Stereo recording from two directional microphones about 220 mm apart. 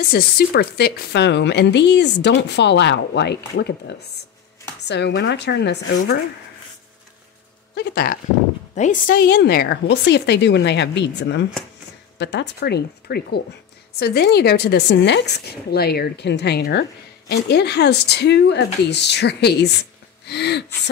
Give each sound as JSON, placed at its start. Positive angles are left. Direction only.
{"t": 0.1, "sound": "speech", "side_deg": 45}
{"t": 7.7, "sound": "speech", "side_deg": 45}